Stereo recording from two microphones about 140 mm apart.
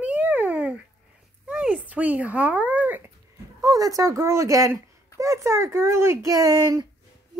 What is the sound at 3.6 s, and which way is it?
Speech, 25° right (ahead or behind).